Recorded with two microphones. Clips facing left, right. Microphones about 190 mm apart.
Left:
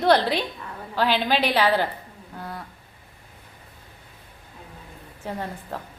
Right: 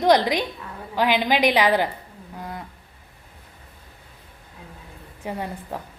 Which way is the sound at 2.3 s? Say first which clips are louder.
Right 1 dB; 15° right (ahead or behind).